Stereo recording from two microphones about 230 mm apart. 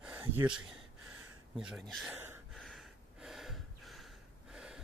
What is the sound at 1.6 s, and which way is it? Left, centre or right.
Speech, centre.